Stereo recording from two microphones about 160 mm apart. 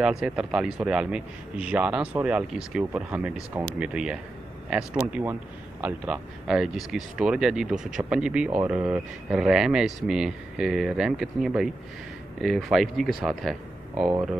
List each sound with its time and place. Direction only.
0.0 s speech: 5° right (ahead or behind)